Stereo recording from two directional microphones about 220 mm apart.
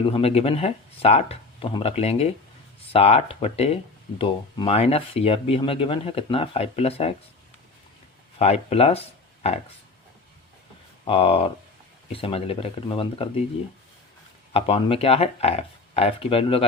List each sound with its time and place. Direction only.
0.0 s speech: 25° left (ahead or behind)
8.4 s speech: 30° left (ahead or behind)
11.0 s speech: 25° left (ahead or behind)
14.5 s speech: 25° left (ahead or behind)